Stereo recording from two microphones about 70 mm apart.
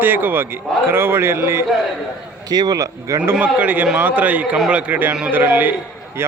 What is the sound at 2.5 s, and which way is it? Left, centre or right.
Speech, right.